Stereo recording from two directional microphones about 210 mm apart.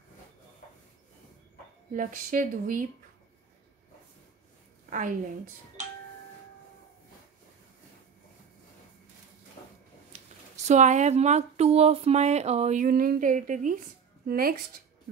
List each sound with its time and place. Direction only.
2.0 s speech: 40° right (ahead or behind)
4.8 s a sound: 40° right (ahead or behind)
10.5 s speech: 35° right (ahead or behind)